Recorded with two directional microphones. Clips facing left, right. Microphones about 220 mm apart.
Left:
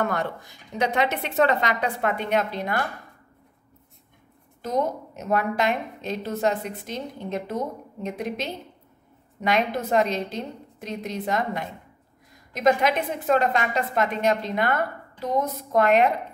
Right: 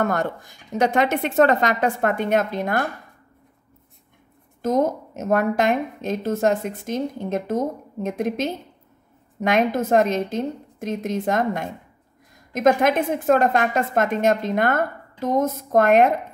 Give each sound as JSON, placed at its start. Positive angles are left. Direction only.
{"t": 0.0, "sound": "a woman's voice", "side_deg": -45}
{"t": 4.6, "sound": "a woman's voice", "side_deg": -45}